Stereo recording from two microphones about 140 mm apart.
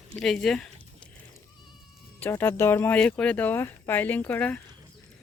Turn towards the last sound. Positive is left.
turn(degrees=10)  # may be behind; listen again after turning